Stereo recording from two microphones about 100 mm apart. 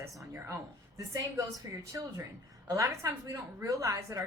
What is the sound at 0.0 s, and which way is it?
A woman's voice, 30° right (ahead or behind).